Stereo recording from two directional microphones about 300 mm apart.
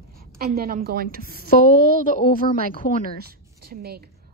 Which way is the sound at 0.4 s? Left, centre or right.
Right.